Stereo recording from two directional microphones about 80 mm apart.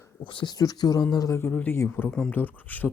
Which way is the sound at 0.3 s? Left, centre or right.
Left.